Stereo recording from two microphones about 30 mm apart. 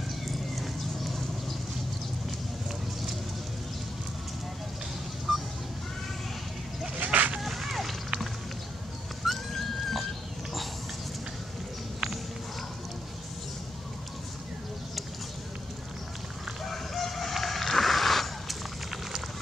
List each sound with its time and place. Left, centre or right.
0.3 s horse: centre
5.3 s goose: centre
7.0 s a sound: right
7.4 s a sound: centre
9.2 s dog: centre
16.6 s crowing: centre